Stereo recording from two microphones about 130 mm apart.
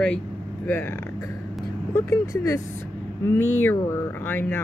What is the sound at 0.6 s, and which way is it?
Speech, 15° left (ahead or behind).